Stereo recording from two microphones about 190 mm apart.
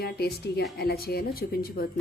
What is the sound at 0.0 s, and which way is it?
Speech, 55° left (ahead or behind).